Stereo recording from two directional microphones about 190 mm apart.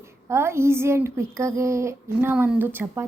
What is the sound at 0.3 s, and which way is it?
A woman's voice, 15° right (ahead or behind).